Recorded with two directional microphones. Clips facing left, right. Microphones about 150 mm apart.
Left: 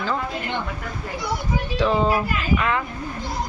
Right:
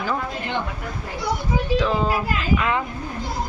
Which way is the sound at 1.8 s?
Centre (ahead or behind).